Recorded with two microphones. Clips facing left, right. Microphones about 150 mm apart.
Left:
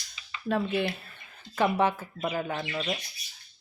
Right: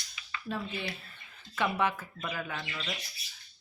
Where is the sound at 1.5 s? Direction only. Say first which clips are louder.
Left 5 dB; 35° left (ahead or behind).